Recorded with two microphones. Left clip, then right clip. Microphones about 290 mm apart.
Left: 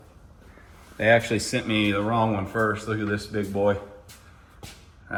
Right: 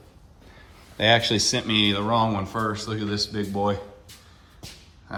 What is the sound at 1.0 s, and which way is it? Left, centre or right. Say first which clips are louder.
Speech: even; right.